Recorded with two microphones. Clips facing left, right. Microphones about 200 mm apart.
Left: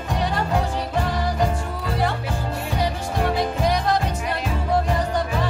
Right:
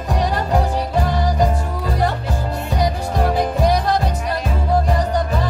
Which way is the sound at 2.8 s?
35° right (ahead or behind).